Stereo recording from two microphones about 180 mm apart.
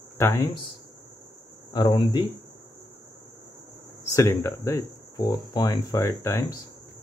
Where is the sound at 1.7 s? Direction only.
25° left (ahead or behind).